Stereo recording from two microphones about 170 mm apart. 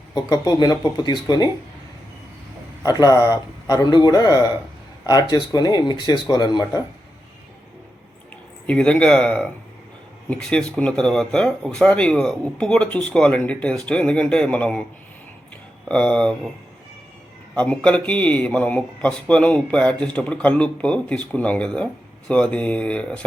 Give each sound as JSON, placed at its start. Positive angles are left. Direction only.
{"t": 0.1, "sound": "speech", "side_deg": 25}
{"t": 2.8, "sound": "speech", "side_deg": 25}
{"t": 8.6, "sound": "speech", "side_deg": 5}
{"t": 15.9, "sound": "speech", "side_deg": 5}
{"t": 17.5, "sound": "a man's voice", "side_deg": 5}